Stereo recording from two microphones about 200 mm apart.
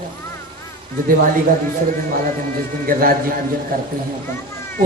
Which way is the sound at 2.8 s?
45° right (ahead or behind).